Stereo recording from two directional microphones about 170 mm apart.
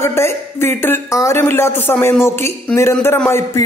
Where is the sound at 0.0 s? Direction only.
15° left (ahead or behind).